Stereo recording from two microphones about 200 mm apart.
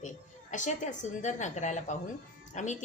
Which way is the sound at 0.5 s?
40° left (ahead or behind).